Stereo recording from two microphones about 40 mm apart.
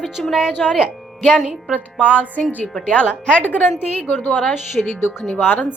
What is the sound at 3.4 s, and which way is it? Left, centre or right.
Speech, left.